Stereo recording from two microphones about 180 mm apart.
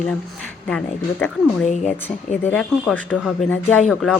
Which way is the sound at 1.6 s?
40° left (ahead or behind).